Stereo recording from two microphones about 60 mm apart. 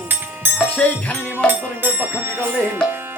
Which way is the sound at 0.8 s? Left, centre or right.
Centre.